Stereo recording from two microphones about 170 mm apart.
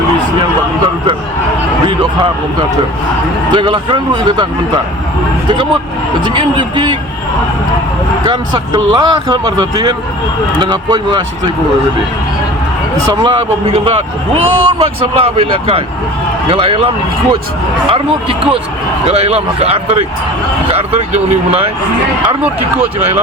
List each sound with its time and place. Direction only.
3.5 s speech: 30° right (ahead or behind)
6.2 s speech: 30° right (ahead or behind)
8.3 s speech: 25° right (ahead or behind)
13.2 s speech: 30° right (ahead or behind)
17.9 s speech: 35° right (ahead or behind)